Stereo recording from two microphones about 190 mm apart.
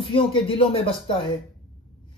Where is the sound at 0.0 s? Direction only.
30° left (ahead or behind).